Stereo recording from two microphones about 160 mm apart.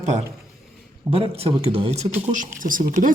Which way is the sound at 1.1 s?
35° right (ahead or behind).